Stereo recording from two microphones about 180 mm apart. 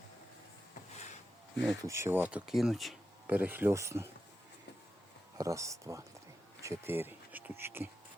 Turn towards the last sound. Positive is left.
turn(degrees=-10)  # may be behind; listen again after turning